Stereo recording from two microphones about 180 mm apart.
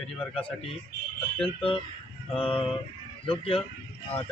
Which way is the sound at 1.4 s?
30° left (ahead or behind).